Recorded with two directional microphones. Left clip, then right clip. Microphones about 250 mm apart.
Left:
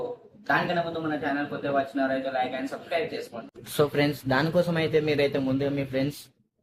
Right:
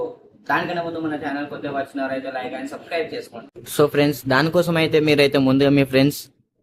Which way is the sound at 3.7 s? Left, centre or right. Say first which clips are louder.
Right 7 dB; centre.